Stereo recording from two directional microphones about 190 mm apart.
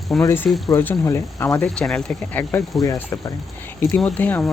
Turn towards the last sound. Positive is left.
turn(degrees=10)  # may be behind; listen again after turning